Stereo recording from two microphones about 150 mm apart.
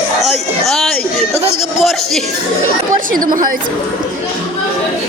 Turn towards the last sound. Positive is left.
turn(degrees=-65)  # may be behind; listen again after turning